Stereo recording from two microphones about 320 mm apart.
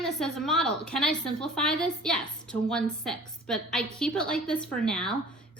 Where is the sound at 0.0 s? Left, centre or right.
Centre.